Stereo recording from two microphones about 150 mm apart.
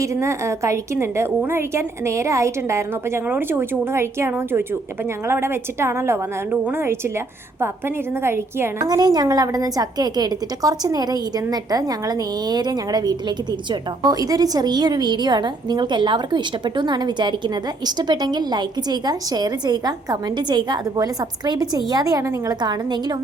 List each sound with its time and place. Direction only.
0.0 s a woman's voice: 20° right (ahead or behind)
8.2 s a woman's voice: 15° right (ahead or behind)